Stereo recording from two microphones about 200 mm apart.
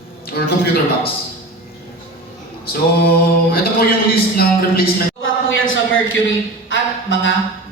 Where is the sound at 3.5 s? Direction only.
50° left (ahead or behind).